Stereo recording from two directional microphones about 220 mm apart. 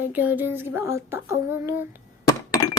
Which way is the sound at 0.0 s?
10° right (ahead or behind).